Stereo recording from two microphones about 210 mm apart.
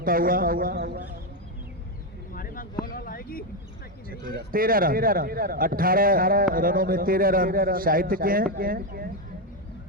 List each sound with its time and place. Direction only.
0.0 s a man's voice: 45° right (ahead or behind)
2.3 s a sound: 40° left (ahead or behind)
4.3 s a man's voice: 45° right (ahead or behind)